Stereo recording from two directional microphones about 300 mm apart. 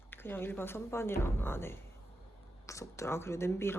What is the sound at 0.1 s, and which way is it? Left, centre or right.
A woman's voice, centre.